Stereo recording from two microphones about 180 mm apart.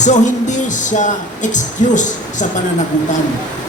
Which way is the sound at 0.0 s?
40° left (ahead or behind).